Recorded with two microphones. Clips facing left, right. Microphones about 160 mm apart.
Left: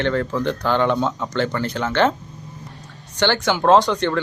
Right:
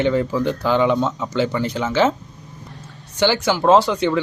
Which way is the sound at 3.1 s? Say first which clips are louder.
Right 1 dB; 10° right (ahead or behind).